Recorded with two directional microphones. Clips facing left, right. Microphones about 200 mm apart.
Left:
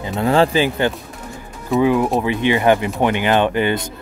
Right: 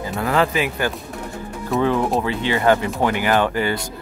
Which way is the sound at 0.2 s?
30° left (ahead or behind).